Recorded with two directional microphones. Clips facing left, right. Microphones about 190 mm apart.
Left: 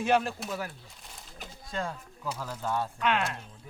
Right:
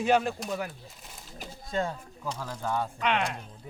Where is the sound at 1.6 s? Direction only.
20° right (ahead or behind).